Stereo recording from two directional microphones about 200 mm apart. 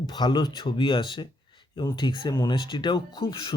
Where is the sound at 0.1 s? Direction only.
20° left (ahead or behind).